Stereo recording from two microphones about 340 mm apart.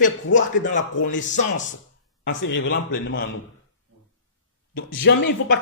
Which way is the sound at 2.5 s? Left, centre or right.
Left.